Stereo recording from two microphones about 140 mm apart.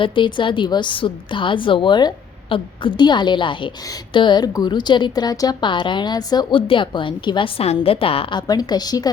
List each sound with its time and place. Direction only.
0.0 s a woman's voice: 35° left (ahead or behind)